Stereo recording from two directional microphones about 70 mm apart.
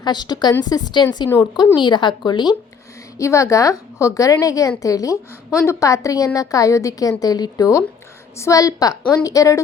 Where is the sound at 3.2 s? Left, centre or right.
Left.